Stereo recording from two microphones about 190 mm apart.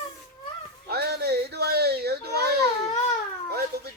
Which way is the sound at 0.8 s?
55° right (ahead or behind).